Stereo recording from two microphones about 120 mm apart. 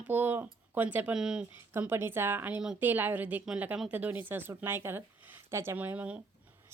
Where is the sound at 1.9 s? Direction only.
20° right (ahead or behind).